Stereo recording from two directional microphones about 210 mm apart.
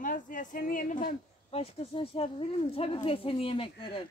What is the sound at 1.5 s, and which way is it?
Speech, 30° left (ahead or behind).